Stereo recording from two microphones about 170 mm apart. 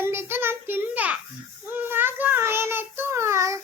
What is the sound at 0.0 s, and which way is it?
Child singing, 15° right (ahead or behind).